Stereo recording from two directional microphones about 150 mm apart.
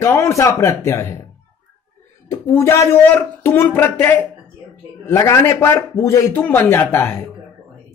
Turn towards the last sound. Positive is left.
turn(degrees=15)  # may be behind; listen again after turning